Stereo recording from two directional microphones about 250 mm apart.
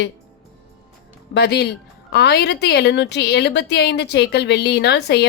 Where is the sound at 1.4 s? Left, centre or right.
Left.